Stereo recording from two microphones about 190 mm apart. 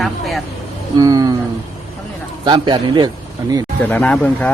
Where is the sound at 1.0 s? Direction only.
20° right (ahead or behind).